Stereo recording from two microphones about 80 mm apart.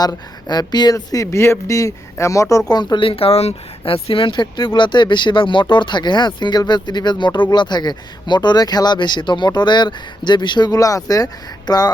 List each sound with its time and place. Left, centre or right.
0.0 s speech: left
2.7 s speech: left
4.1 s speech: left